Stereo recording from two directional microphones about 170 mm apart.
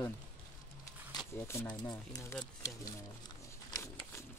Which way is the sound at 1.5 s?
15° left (ahead or behind).